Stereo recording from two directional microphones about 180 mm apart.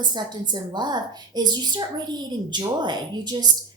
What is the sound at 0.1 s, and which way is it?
A woman's voice, 25° right (ahead or behind).